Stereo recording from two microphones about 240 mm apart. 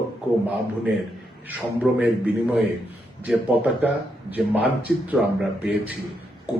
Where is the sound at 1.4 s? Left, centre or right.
Centre.